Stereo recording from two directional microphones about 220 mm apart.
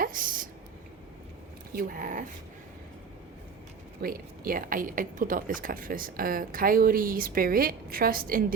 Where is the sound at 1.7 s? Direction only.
40° right (ahead or behind).